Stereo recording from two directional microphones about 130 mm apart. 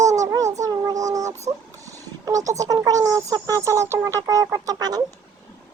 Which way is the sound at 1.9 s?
25° right (ahead or behind).